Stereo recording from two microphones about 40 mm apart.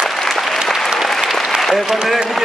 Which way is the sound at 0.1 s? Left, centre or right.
Centre.